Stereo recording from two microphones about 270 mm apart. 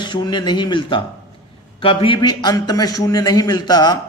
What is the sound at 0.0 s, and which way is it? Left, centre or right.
A man's voice, centre.